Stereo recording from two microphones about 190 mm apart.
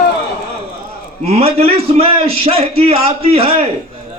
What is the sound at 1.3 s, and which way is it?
A man's voice, 30° right (ahead or behind).